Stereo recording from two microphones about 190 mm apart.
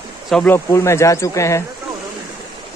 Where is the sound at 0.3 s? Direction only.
10° left (ahead or behind).